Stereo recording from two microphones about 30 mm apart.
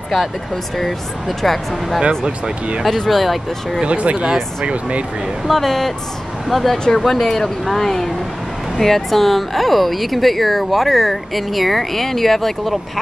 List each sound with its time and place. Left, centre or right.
1.4 s speech: centre
2.0 s speech: right
3.1 s speech: centre
3.8 s speech: right
5.5 s speech: centre